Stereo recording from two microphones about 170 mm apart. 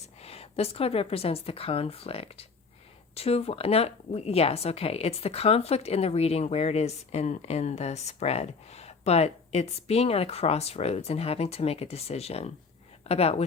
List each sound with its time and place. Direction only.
0.2 s speech: 35° left (ahead or behind)